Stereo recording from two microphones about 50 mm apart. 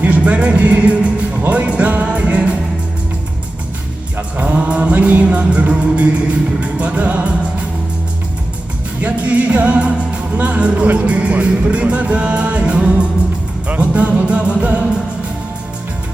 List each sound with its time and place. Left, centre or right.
0.0 s music: right
4.4 s music: right
9.0 s music: right